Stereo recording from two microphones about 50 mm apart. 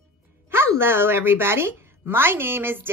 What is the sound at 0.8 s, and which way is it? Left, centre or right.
A woman's voice, right.